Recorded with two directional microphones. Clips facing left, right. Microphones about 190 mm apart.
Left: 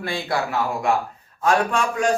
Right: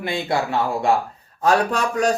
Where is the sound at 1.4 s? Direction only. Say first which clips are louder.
Right 1 dB; 40° right (ahead or behind).